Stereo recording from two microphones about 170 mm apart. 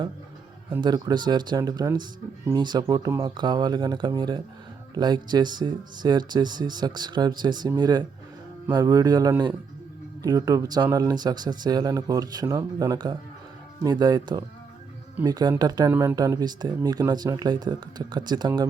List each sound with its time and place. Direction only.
0.8 s speech: 25° right (ahead or behind)